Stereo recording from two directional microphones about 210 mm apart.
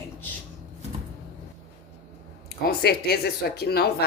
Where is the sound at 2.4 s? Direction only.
50° left (ahead or behind).